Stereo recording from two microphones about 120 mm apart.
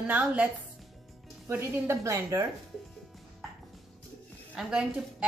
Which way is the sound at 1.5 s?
15° right (ahead or behind).